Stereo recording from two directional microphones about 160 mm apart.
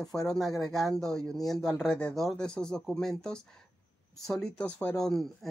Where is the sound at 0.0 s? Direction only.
5° left (ahead or behind).